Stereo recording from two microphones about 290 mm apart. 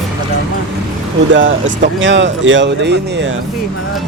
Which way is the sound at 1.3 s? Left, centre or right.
Right.